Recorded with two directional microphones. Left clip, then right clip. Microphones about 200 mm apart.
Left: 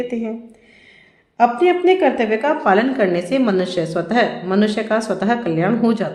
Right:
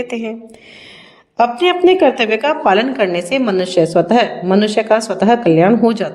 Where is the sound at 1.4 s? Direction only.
50° right (ahead or behind).